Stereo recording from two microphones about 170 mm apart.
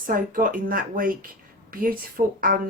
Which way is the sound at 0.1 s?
55° right (ahead or behind).